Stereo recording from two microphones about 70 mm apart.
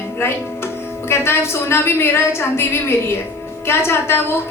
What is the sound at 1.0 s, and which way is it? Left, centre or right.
A woman's voice, left.